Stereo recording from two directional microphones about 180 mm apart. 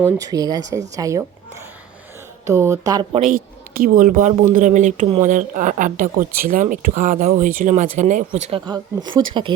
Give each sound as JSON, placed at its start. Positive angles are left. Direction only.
{"t": 0.0, "sound": "speech", "side_deg": -20}
{"t": 2.5, "sound": "speech", "side_deg": -15}
{"t": 3.2, "sound": "speech", "side_deg": -50}
{"t": 8.4, "sound": "speech", "side_deg": -25}